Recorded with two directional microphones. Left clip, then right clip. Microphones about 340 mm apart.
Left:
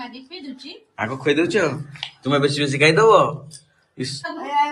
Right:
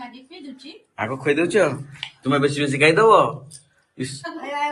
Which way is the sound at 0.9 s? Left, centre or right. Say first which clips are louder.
Left 1 dB; centre.